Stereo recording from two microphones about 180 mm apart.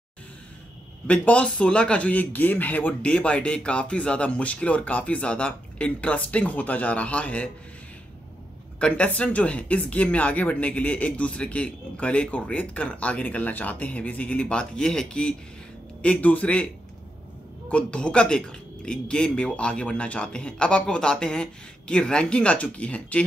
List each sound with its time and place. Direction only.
1.0 s speech: 10° left (ahead or behind)
8.7 s speech: 5° left (ahead or behind)
17.6 s speech: 5° left (ahead or behind)